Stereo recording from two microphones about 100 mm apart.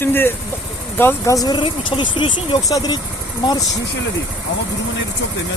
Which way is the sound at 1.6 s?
55° left (ahead or behind).